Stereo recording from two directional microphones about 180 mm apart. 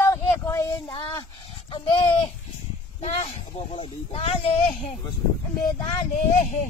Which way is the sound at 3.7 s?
35° left (ahead or behind).